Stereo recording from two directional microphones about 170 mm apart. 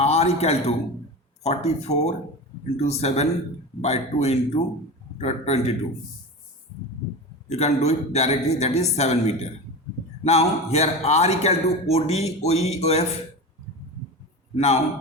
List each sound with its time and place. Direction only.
0.0 s a man's voice: 40° left (ahead or behind)
7.5 s a man's voice: 40° left (ahead or behind)
14.5 s a man's voice: 40° left (ahead or behind)